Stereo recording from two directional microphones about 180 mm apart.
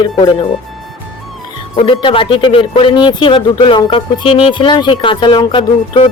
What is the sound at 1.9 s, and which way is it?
Speech, 30° left (ahead or behind).